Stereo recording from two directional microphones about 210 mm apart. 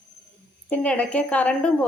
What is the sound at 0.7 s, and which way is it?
A woman's voice, 5° left (ahead or behind).